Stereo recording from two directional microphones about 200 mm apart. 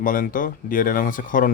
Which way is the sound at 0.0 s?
45° left (ahead or behind).